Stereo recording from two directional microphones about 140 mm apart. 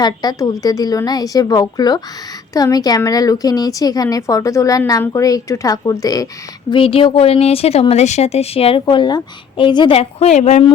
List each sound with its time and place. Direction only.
0.0 s speech: 30° left (ahead or behind)
6.7 s speech: 40° left (ahead or behind)